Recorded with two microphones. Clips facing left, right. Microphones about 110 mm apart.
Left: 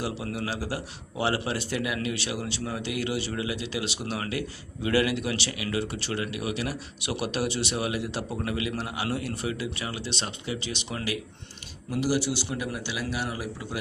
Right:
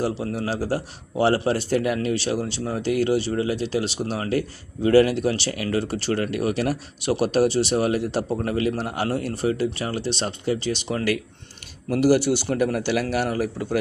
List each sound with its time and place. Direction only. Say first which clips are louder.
0.0 s speech: right 6 dB; 35° right (ahead or behind)
11.9 s a man's voice: right 8 dB; 55° right (ahead or behind)